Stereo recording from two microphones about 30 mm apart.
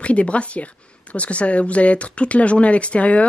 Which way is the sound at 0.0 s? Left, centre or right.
Left.